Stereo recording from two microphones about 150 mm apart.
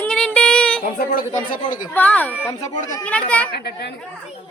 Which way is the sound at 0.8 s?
70° left (ahead or behind).